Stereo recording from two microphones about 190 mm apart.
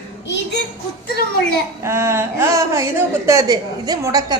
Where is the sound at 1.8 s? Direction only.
15° right (ahead or behind).